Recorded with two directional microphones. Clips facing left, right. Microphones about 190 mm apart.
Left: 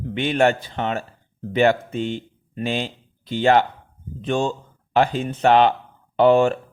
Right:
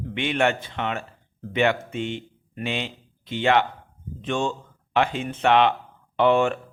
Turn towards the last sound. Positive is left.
turn(degrees=35)  # may be behind; listen again after turning